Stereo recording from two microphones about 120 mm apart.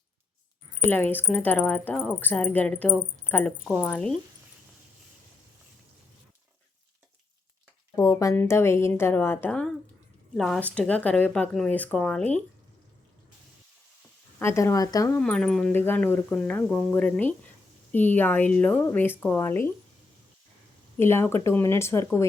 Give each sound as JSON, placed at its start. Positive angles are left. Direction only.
{"t": 0.9, "sound": "speech", "side_deg": 15}
{"t": 3.6, "sound": "speech", "side_deg": -5}
{"t": 3.8, "sound": "speech", "side_deg": 10}
{"t": 7.9, "sound": "a woman's voice", "side_deg": 25}
{"t": 10.3, "sound": "speech", "side_deg": 5}
{"t": 14.3, "sound": "a woman's voice", "side_deg": 25}
{"t": 15.2, "sound": "speech", "side_deg": 5}
{"t": 15.7, "sound": "a woman's voice", "side_deg": 15}
{"t": 21.0, "sound": "a woman's voice", "side_deg": 20}